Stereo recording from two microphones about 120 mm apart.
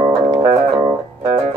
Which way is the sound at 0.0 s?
40° right (ahead or behind).